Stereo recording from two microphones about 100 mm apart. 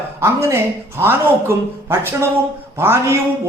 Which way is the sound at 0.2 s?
25° right (ahead or behind).